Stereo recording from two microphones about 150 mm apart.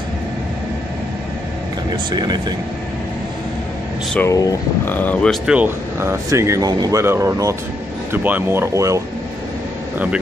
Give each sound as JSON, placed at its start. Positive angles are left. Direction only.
{"t": 2.0, "sound": "speech", "side_deg": -30}
{"t": 4.3, "sound": "speech", "side_deg": 20}
{"t": 4.9, "sound": "speech", "side_deg": 10}
{"t": 5.5, "sound": "speech", "side_deg": -15}